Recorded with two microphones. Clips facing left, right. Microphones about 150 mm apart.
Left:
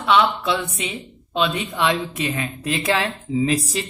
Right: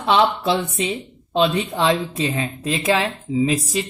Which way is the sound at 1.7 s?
30° right (ahead or behind).